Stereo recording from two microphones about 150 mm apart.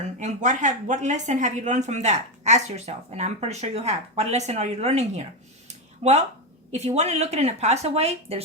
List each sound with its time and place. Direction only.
0.2 s speech: 55° right (ahead or behind)